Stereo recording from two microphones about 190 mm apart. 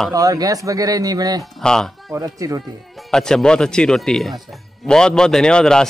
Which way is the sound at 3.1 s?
5° left (ahead or behind).